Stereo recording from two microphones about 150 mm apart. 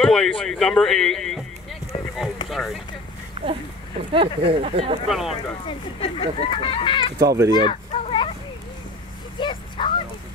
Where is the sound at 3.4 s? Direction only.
45° right (ahead or behind).